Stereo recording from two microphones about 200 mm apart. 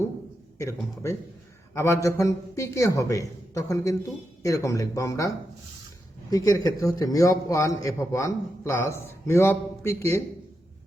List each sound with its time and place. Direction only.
1.7 s a man's voice: 15° left (ahead or behind)
6.3 s a man's voice: 20° left (ahead or behind)